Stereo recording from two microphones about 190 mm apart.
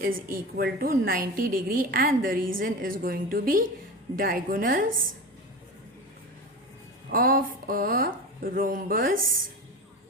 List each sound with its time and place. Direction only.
0.0 s a woman's voice: 50° right (ahead or behind)
7.1 s a woman's voice: 50° right (ahead or behind)